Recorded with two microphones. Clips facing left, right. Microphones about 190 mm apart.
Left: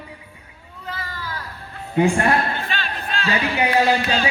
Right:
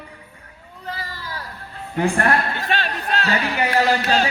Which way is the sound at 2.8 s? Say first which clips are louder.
Right 3 dB; 45° right (ahead or behind).